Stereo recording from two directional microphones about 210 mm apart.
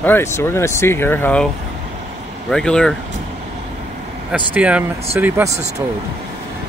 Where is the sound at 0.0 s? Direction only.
10° left (ahead or behind).